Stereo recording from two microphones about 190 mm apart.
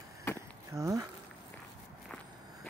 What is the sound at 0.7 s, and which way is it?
Speech, 15° right (ahead or behind).